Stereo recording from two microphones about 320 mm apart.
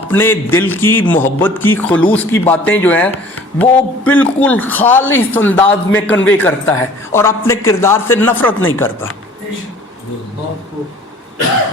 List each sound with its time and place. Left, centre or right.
0.1 s a man's voice: centre